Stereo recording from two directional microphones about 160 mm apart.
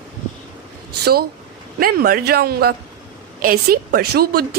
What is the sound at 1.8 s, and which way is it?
Speech, 65° right (ahead or behind).